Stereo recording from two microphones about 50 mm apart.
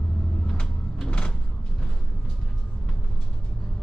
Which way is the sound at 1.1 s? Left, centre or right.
Left.